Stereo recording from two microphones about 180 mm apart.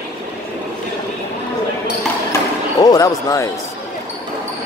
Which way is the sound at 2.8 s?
20° left (ahead or behind).